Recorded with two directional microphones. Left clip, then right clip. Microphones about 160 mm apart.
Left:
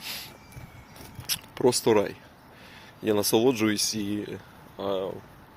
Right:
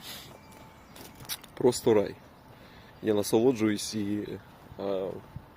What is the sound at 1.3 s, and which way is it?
A man's voice, 10° right (ahead or behind).